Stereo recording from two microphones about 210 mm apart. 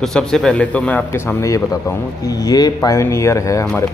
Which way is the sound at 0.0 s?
Centre (ahead or behind).